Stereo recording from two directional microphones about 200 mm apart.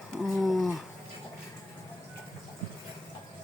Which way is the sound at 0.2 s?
Centre (ahead or behind).